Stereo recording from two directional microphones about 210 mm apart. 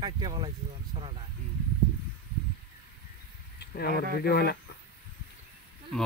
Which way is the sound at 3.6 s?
50° left (ahead or behind).